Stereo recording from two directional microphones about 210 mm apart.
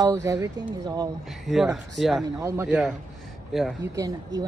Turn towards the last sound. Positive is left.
turn(degrees=-15)  # may be behind; listen again after turning